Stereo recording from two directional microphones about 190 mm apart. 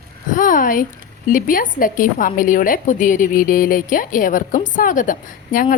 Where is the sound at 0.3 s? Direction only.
45° left (ahead or behind).